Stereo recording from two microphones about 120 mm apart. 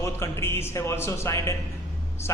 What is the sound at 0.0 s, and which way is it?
A man's voice, 20° left (ahead or behind).